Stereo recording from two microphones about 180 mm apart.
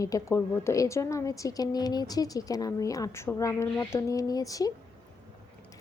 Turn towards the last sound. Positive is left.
turn(degrees=20)  # may be behind; listen again after turning